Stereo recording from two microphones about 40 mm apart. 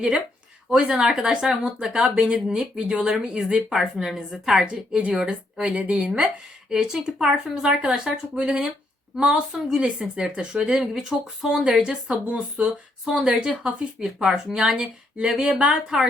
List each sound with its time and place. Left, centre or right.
0.8 s speech: right
3.7 s speech: centre
4.9 s speech: centre
5.7 s speech: right
6.7 s speech: centre
9.7 s speech: right